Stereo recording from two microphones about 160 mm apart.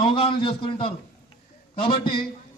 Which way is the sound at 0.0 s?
35° left (ahead or behind).